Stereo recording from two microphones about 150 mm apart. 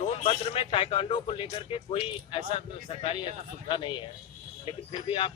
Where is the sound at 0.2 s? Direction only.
40° left (ahead or behind).